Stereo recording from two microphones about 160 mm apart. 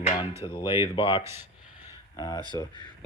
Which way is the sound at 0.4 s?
30° left (ahead or behind).